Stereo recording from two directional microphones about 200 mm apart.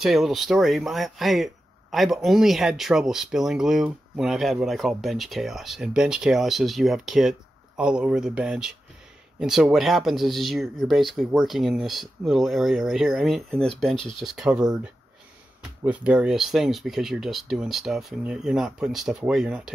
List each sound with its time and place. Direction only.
0.0 s speech: centre (ahead or behind)
15.8 s speech: 5° right (ahead or behind)